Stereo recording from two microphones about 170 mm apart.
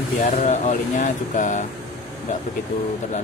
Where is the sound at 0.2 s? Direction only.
45° left (ahead or behind).